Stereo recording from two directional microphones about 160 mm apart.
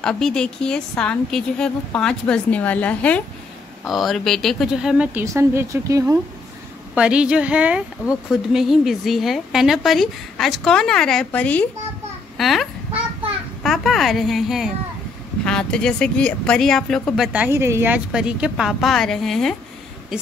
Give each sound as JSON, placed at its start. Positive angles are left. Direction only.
{"t": 0.0, "sound": "a woman's voice", "side_deg": 5}
{"t": 5.2, "sound": "a woman's voice", "side_deg": -15}
{"t": 7.0, "sound": "a woman's voice", "side_deg": -5}
{"t": 17.3, "sound": "a woman's voice", "side_deg": -10}